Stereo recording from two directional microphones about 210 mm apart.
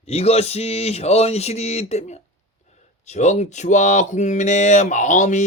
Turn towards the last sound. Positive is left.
turn(degrees=35)  # may be behind; listen again after turning